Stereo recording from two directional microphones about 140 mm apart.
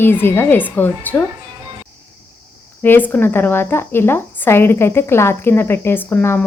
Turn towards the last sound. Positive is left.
turn(degrees=15)  # may be behind; listen again after turning